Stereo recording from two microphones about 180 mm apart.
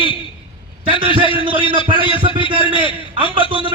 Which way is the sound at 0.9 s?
30° right (ahead or behind).